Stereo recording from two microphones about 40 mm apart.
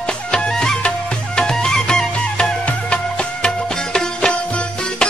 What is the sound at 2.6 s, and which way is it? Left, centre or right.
Music, left.